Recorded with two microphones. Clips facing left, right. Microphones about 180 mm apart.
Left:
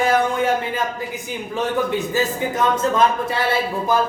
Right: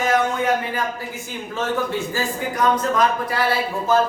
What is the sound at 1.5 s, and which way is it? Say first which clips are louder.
A man's voice: left 2 dB; 15° left (ahead or behind).